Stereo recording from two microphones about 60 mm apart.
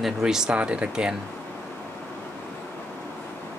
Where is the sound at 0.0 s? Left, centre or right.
Centre.